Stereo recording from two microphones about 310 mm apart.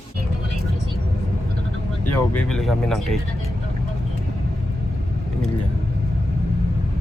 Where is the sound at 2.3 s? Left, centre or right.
Centre.